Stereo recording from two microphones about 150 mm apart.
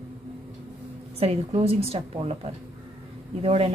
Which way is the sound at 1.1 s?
40° right (ahead or behind).